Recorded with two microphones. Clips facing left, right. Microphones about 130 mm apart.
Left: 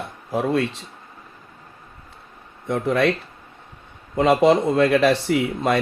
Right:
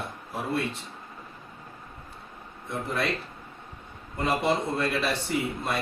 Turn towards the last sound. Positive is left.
turn(degrees=90)